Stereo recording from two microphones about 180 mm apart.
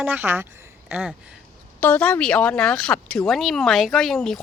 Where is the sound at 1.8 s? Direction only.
10° left (ahead or behind).